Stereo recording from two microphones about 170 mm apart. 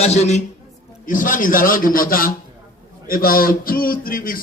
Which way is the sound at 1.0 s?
50° left (ahead or behind).